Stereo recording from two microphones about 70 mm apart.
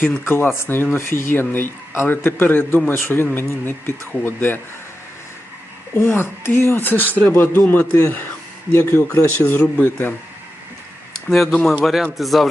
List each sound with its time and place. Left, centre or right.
0.0 s a man's voice: left
6.0 s a man's voice: left
9.6 s speech: left
11.3 s speech: centre